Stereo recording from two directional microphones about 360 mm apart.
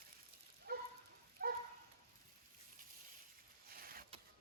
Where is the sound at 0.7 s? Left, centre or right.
Right.